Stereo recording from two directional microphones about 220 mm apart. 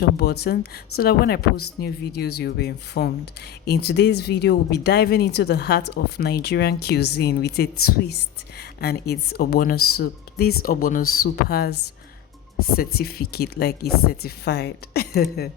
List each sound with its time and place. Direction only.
0.2 s speech: 45° left (ahead or behind)